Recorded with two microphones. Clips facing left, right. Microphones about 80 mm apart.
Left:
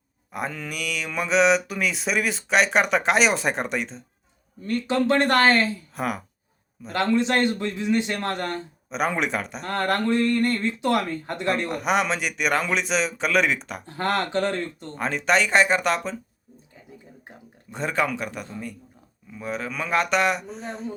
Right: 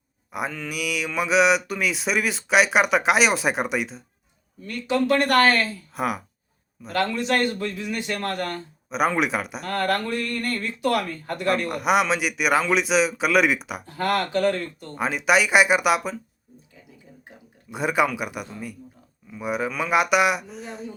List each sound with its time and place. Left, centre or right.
0.3 s speech: centre
4.6 s speech: left
5.9 s speech: centre
6.9 s speech: left
8.9 s speech: centre
9.6 s speech: left
11.7 s speech: centre
13.8 s speech: left
14.9 s speech: centre
17.7 s speech: centre